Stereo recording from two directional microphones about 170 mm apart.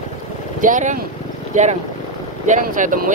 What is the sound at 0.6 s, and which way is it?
Speech, 50° right (ahead or behind).